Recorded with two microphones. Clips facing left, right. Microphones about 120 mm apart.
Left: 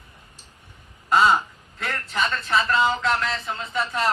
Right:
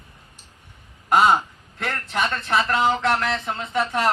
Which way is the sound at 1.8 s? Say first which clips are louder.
Right 2 dB; 55° right (ahead or behind).